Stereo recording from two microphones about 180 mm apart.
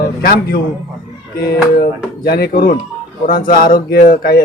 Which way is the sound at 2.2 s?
60° left (ahead or behind).